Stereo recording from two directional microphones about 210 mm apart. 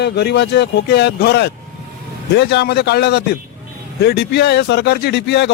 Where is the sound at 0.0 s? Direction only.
55° left (ahead or behind).